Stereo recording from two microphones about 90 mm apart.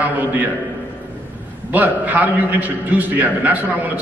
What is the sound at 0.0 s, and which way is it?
Speech, 20° right (ahead or behind).